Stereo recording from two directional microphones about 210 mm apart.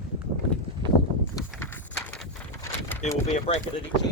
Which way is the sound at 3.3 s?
30° left (ahead or behind).